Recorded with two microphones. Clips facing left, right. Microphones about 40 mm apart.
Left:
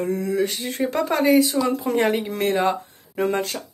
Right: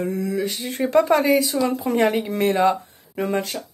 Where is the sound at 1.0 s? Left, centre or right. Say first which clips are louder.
Right 1 dB; centre.